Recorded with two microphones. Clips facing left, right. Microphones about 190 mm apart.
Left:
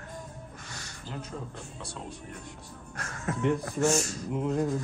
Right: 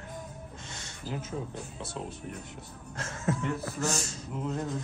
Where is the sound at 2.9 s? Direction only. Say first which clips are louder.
Right 2 dB; 25° right (ahead or behind).